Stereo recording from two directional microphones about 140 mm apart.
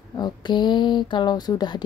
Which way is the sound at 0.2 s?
35° left (ahead or behind).